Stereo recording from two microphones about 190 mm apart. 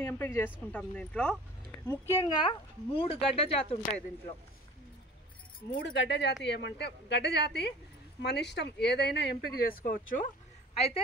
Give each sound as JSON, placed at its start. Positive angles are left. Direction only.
{"t": 0.0, "sound": "a woman's voice", "side_deg": 10}
{"t": 2.9, "sound": "speech", "side_deg": 30}
{"t": 5.8, "sound": "speech", "side_deg": 65}